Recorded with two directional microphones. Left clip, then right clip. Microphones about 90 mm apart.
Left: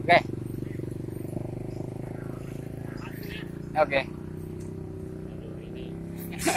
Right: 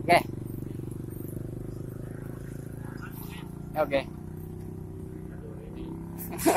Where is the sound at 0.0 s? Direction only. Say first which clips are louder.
Left 2 dB; 90° right.